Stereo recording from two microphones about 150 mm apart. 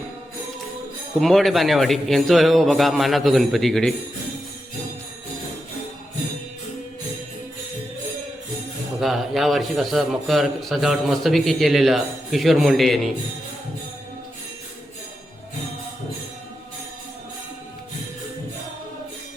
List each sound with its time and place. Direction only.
1.2 s a man's voice: centre (ahead or behind)
9.0 s a man's voice: centre (ahead or behind)